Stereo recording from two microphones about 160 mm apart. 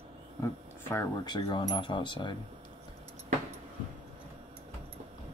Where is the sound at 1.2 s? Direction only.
25° left (ahead or behind).